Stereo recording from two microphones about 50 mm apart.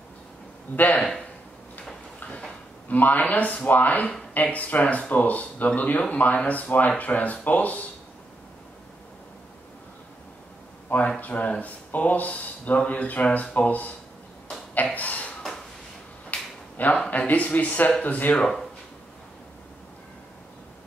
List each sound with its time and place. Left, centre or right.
0.7 s speech: left
2.9 s speech: left
10.9 s speech: left
15.0 s a sound: left
16.3 s finger snapping: left
16.8 s speech: left
18.3 s speech: centre